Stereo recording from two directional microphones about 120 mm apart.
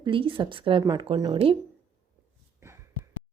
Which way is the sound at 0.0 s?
45° right (ahead or behind).